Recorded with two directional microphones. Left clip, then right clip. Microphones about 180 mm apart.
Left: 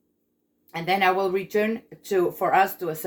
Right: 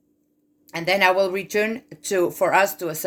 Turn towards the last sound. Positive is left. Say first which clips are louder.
# right 2 dB
turn(degrees=-65)  # may be behind; listen again after turning